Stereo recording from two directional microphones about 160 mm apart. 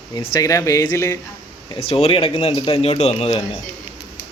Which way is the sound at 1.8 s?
40° left (ahead or behind).